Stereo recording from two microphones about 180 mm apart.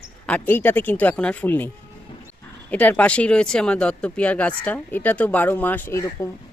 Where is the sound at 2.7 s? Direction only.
10° left (ahead or behind).